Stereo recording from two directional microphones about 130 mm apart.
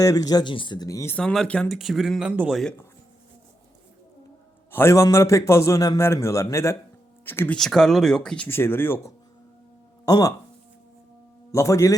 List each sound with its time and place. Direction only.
0.0 s a man's voice: 25° left (ahead or behind)
1.1 s speech: 5° left (ahead or behind)
2.3 s speech: 15° right (ahead or behind)
4.7 s a man's voice: 20° left (ahead or behind)
7.5 s speech: 5° left (ahead or behind)
8.4 s speech: 15° left (ahead or behind)
10.1 s a man's voice: 30° left (ahead or behind)
11.5 s a man's voice: 25° left (ahead or behind)